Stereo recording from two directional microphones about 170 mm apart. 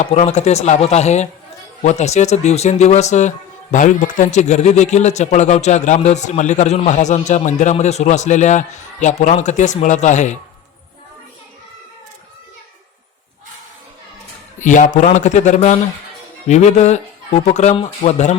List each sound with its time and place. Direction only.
0.0 s speech: 40° left (ahead or behind)
14.6 s speech: 50° left (ahead or behind)